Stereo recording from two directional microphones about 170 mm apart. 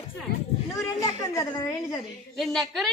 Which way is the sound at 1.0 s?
20° left (ahead or behind).